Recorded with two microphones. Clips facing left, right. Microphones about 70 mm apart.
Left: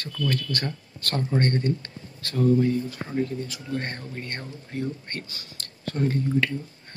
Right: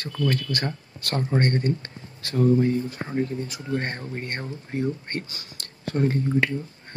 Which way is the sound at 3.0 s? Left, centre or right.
Right.